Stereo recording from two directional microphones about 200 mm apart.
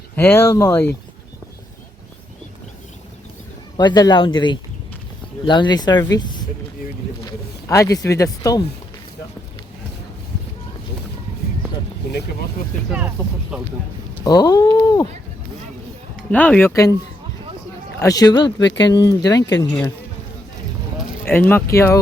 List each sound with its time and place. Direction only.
0.2 s speech: 10° left (ahead or behind)
3.8 s speech: 20° left (ahead or behind)
7.3 s speech: 15° left (ahead or behind)
12.0 s vehicle: 55° left (ahead or behind)
13.5 s speech: 5° right (ahead or behind)
14.2 s speech: 20° left (ahead or behind)
16.3 s speech: 10° left (ahead or behind)
18.0 s speech: 20° left (ahead or behind)
21.2 s speech: 10° left (ahead or behind)